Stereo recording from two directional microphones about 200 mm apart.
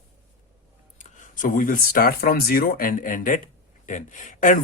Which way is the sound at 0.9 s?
40° left (ahead or behind).